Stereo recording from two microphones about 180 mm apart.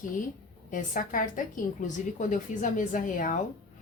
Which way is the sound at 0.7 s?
50° left (ahead or behind).